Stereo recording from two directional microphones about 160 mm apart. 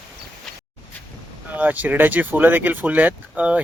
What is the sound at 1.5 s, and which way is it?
Speech, 10° right (ahead or behind).